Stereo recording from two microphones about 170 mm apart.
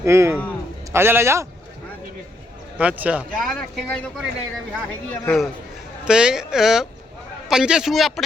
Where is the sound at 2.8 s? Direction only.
10° right (ahead or behind).